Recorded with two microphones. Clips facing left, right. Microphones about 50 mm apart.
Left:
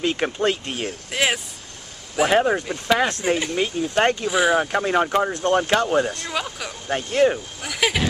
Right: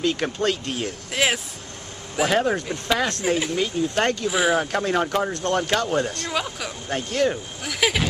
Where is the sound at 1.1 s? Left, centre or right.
Centre.